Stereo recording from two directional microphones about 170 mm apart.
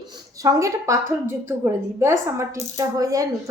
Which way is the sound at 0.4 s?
20° right (ahead or behind).